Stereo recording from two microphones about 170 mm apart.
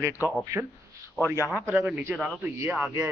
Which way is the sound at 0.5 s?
20° right (ahead or behind).